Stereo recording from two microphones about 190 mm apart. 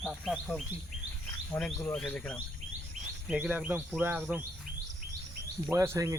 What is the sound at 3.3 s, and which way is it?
Insect, 5° right (ahead or behind).